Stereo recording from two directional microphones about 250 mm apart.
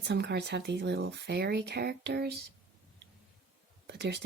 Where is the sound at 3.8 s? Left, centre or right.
Right.